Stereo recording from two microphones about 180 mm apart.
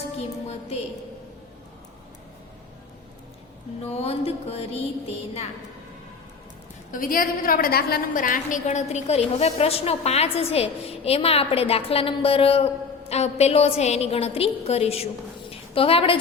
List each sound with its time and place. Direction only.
0.2 s music: 35° left (ahead or behind)
3.8 s a woman's voice: 35° left (ahead or behind)
6.9 s a woman's voice: 50° left (ahead or behind); by 15.0 s 35° left (ahead or behind)
15.4 s a sound: 30° left (ahead or behind)